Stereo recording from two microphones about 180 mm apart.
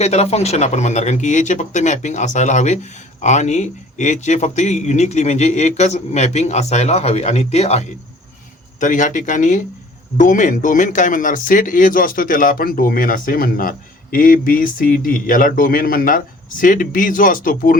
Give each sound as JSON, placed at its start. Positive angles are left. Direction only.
{"t": 0.0, "sound": "a man's voice", "side_deg": 35}